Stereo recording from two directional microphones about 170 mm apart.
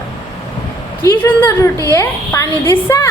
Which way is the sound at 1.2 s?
10° left (ahead or behind).